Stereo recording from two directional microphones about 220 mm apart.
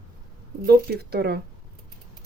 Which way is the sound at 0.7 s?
45° right (ahead or behind).